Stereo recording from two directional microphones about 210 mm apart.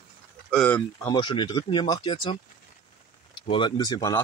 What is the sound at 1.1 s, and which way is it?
Speech, 20° left (ahead or behind).